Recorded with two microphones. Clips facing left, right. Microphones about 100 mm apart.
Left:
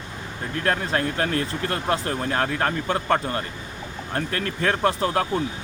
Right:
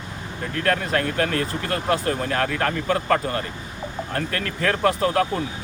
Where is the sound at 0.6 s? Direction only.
25° left (ahead or behind).